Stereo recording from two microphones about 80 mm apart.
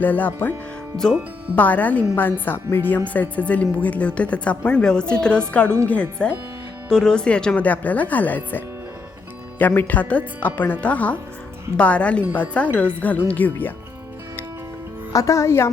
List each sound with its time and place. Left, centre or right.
0.0 s speech: left
1.5 s a woman's voice: centre
9.6 s a woman's voice: left
15.1 s speech: left